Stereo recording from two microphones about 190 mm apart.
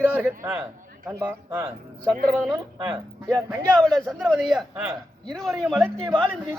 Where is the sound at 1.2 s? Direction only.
20° right (ahead or behind).